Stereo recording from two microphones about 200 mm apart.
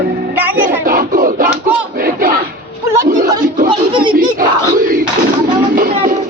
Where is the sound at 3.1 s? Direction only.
40° right (ahead or behind).